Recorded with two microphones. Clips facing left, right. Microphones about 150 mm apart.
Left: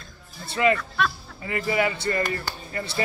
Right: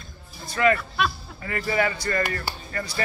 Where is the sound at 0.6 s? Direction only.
20° left (ahead or behind).